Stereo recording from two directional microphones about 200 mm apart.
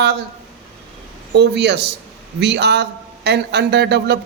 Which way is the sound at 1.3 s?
55° right (ahead or behind).